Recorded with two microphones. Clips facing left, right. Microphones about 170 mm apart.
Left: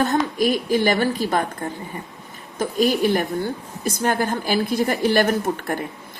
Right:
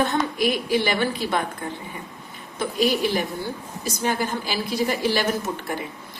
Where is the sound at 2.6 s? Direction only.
45° left (ahead or behind).